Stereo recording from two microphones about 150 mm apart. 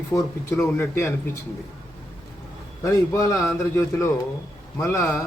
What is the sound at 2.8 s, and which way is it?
A man's voice, 20° left (ahead or behind).